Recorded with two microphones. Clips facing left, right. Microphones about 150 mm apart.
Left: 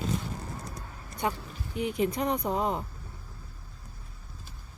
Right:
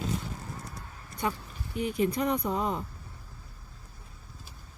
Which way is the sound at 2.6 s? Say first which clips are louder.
Left 1 dB; 25° left (ahead or behind).